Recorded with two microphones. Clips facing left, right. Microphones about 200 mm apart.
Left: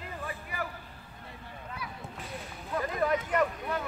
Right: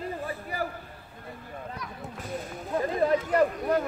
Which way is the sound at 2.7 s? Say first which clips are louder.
Right 4 dB; 30° right (ahead or behind).